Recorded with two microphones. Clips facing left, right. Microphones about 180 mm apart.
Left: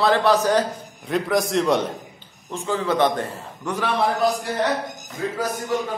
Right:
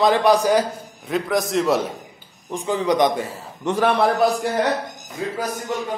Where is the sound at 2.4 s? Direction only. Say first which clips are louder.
Right 3 dB; 15° right (ahead or behind).